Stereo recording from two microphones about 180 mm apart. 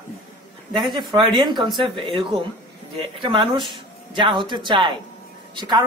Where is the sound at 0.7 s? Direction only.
25° right (ahead or behind).